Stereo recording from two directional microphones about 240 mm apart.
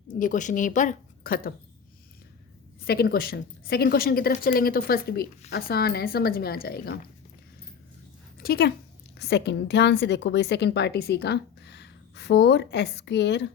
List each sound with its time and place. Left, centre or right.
0.1 s a woman's voice: left
2.8 s speech: left
8.4 s a woman's voice: left